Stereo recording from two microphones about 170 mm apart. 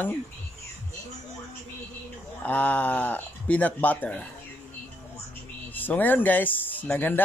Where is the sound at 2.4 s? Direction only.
10° left (ahead or behind).